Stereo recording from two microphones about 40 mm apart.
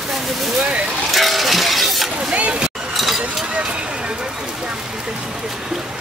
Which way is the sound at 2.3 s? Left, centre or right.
Right.